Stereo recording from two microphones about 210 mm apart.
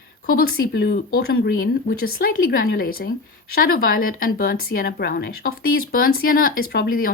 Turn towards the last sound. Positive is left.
turn(degrees=45)  # may be behind; listen again after turning